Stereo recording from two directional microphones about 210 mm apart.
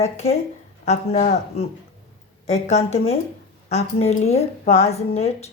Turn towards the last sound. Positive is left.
turn(degrees=30)  # may be behind; listen again after turning